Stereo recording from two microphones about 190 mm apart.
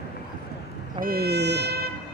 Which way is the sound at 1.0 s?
55° right (ahead or behind).